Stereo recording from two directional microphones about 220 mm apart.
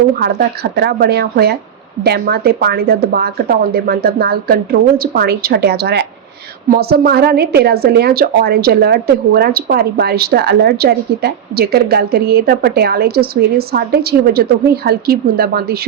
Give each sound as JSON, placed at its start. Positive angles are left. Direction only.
{"t": 0.2, "sound": "a woman's voice", "side_deg": -45}